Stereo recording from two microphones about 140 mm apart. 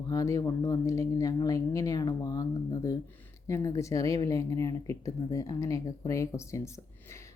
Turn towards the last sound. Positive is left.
turn(degrees=20)  # may be behind; listen again after turning